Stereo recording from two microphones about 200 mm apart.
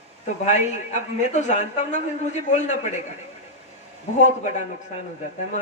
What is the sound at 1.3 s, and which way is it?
Speech, 35° left (ahead or behind).